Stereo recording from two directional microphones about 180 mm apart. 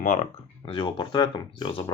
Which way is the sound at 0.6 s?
30° left (ahead or behind).